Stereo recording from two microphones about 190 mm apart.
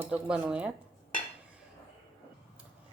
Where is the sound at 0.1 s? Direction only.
5° right (ahead or behind).